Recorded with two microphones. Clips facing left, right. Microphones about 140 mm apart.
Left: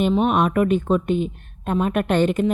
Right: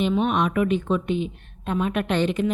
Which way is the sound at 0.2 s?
50° left (ahead or behind).